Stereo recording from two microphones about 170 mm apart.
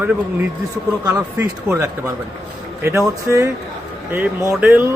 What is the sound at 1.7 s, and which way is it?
Speech, 20° right (ahead or behind).